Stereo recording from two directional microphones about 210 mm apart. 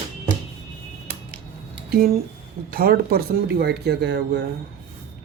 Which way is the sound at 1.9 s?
45° right (ahead or behind).